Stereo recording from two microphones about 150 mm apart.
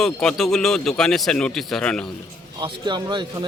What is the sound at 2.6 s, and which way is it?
Speech, 30° right (ahead or behind).